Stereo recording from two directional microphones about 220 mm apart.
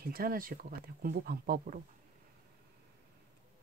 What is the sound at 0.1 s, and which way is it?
Speech, 40° right (ahead or behind).